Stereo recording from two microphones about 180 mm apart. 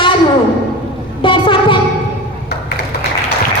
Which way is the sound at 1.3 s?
30° left (ahead or behind).